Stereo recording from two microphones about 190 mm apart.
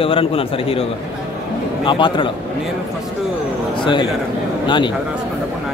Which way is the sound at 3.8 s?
25° left (ahead or behind).